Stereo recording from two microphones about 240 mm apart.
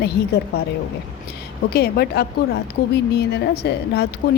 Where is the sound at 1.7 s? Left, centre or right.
Left.